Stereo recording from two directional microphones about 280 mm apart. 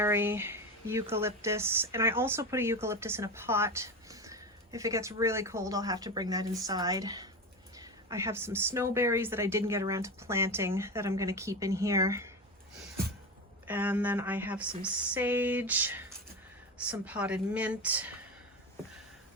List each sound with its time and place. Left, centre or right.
0.0 s speech: centre
13.7 s a woman's voice: centre